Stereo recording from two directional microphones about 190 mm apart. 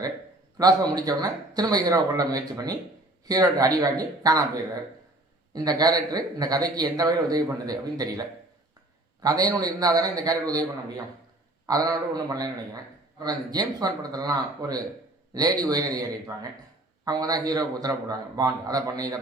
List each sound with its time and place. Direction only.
0.6 s a man's voice: 20° right (ahead or behind)
9.2 s a man's voice: 20° right (ahead or behind)